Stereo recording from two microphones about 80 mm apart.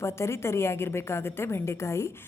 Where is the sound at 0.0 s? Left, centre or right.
Left.